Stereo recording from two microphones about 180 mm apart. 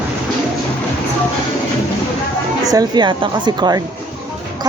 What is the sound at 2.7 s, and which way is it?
Speech, 25° right (ahead or behind).